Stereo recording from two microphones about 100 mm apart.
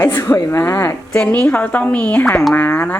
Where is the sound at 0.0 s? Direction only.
20° left (ahead or behind).